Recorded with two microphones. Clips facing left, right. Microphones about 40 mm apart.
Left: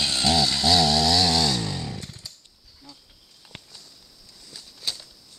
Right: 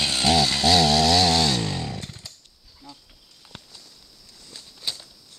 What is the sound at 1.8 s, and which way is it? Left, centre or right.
Chainsaw, right.